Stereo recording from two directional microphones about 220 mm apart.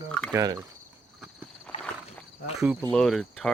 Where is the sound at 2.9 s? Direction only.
Centre (ahead or behind).